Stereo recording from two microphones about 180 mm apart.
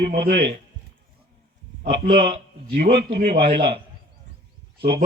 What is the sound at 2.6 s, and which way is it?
Speech, 60° right (ahead or behind).